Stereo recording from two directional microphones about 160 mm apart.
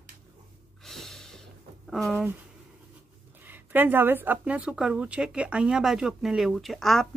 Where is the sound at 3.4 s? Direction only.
10° right (ahead or behind).